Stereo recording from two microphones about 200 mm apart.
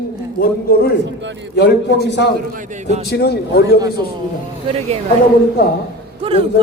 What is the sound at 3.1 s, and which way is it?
Speech, 55° left (ahead or behind).